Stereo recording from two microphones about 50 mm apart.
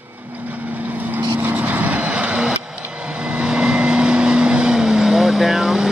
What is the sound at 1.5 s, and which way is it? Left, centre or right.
Vehicle, right.